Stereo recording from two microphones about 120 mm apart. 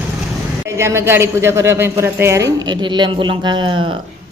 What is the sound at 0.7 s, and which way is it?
A woman's voice, 25° right (ahead or behind).